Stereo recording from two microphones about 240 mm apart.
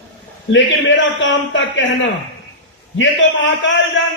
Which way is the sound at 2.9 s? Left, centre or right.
Left.